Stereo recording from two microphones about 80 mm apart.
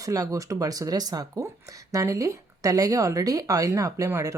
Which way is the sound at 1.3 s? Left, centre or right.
Right.